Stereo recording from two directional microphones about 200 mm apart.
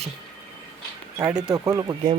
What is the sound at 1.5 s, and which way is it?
Speech, 15° right (ahead or behind).